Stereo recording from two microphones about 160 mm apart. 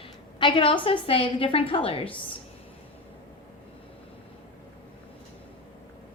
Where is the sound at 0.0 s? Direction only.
30° left (ahead or behind).